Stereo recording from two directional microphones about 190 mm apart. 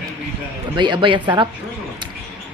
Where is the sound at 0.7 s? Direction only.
25° right (ahead or behind).